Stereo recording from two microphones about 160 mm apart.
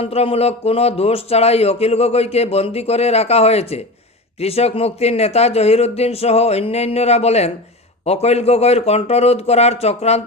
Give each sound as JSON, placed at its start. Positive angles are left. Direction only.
{"t": 0.0, "sound": "speech", "side_deg": 40}